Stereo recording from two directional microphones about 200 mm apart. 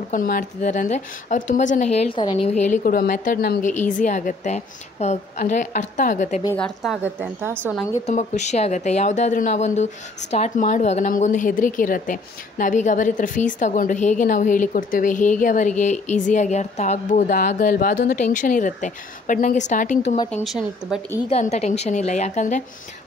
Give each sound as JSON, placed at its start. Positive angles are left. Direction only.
{"t": 0.1, "sound": "a woman's voice", "side_deg": 45}
{"t": 2.1, "sound": "a woman's voice", "side_deg": 25}
{"t": 6.4, "sound": "a woman's voice", "side_deg": 10}
{"t": 8.1, "sound": "a woman's voice", "side_deg": 35}
{"t": 20.2, "sound": "a woman's voice", "side_deg": 0}
{"t": 21.3, "sound": "a woman's voice", "side_deg": 35}